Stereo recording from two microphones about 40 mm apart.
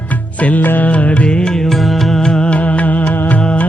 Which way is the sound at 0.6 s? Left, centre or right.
Left.